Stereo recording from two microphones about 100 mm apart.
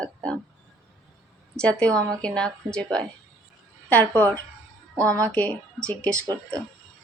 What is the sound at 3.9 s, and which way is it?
Speech, 15° left (ahead or behind).